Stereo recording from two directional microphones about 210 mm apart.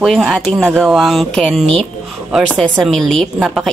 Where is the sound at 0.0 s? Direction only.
Centre (ahead or behind).